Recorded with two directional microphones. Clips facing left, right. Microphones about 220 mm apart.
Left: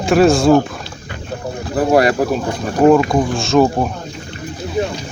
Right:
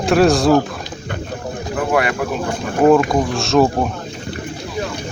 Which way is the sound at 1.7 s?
35° left (ahead or behind).